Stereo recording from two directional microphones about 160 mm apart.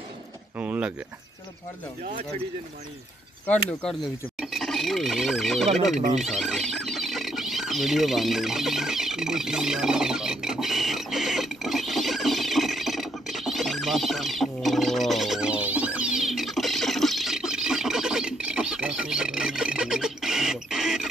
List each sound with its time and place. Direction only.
0.6 s speech: 10° right (ahead or behind)
4.4 s speech: centre (ahead or behind)
5.9 s speech: 45° right (ahead or behind)
6.2 s a sound: centre (ahead or behind)